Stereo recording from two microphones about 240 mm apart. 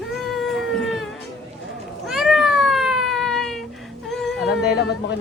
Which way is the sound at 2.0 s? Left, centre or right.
Centre.